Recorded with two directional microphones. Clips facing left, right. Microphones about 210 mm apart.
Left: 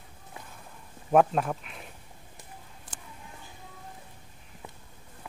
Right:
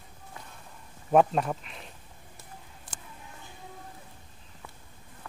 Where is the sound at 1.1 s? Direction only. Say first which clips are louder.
Even; centre (ahead or behind).